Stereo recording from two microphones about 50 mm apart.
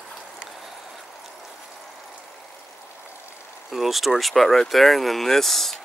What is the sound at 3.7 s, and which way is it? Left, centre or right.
Speech, centre.